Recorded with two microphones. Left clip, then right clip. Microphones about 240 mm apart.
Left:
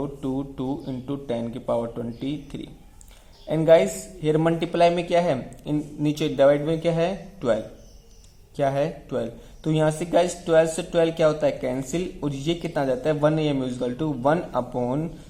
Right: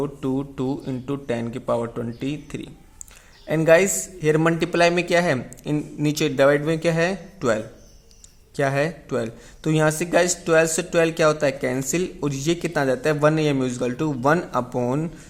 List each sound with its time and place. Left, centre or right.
0.0 s speech: right